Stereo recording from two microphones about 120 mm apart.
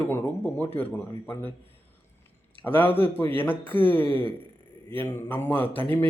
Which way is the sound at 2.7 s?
15° left (ahead or behind).